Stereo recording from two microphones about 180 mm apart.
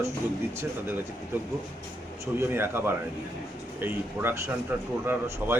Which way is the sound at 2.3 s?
15° right (ahead or behind).